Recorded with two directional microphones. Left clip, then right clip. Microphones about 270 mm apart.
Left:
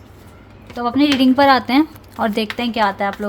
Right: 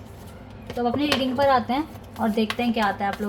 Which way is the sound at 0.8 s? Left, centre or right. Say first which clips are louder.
Left 7 dB; left.